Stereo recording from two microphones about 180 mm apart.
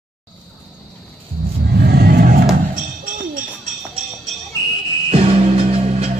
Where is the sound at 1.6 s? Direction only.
65° right (ahead or behind).